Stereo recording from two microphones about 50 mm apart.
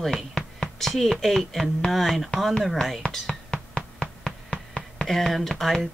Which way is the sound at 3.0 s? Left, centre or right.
Left.